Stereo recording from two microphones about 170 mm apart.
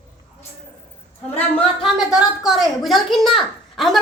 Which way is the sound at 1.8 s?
5° right (ahead or behind).